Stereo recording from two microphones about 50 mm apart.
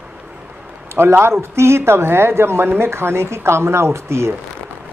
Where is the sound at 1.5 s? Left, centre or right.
Right.